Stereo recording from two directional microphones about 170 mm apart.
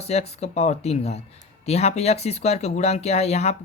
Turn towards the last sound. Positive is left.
turn(degrees=40)  # may be behind; listen again after turning